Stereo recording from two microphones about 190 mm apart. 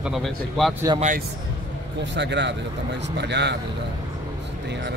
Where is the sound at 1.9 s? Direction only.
65° right (ahead or behind).